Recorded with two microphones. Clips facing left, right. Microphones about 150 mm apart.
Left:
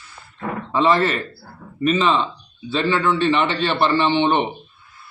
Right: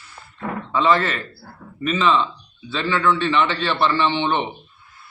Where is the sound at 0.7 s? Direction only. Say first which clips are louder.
Left 1 dB; 35° left (ahead or behind).